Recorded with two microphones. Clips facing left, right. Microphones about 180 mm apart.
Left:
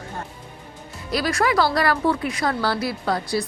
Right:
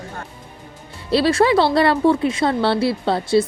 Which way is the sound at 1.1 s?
30° right (ahead or behind).